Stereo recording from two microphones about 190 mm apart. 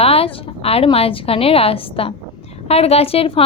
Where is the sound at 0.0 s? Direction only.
30° left (ahead or behind).